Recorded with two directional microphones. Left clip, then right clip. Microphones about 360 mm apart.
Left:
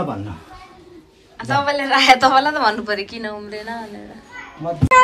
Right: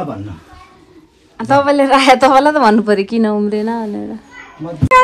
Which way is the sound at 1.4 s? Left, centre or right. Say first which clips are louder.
Right 8 dB; centre.